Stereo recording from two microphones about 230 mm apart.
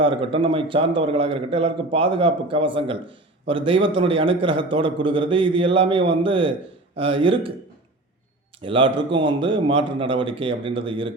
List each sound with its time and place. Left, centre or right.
0.0 s a man's voice: right
8.6 s a man's voice: right